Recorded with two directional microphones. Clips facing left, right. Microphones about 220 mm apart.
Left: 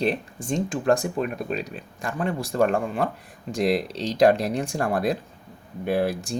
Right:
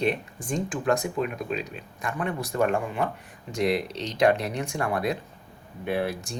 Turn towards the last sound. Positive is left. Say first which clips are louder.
# left 4 dB
turn(degrees=35)  # may be behind; listen again after turning